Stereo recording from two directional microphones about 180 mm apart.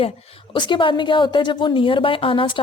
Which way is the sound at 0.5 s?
25° left (ahead or behind).